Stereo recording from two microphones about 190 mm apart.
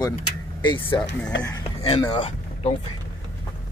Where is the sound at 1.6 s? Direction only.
30° left (ahead or behind).